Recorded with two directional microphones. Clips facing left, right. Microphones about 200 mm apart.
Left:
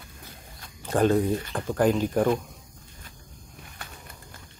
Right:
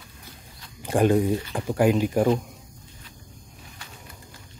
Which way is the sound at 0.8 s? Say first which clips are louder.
Right 2 dB; 15° right (ahead or behind).